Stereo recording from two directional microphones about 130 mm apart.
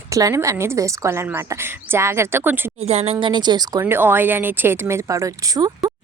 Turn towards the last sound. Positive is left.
turn(degrees=-30)  # may be behind; listen again after turning